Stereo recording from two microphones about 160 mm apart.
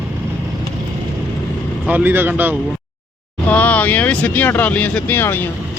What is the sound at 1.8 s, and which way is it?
Speech, 10° right (ahead or behind).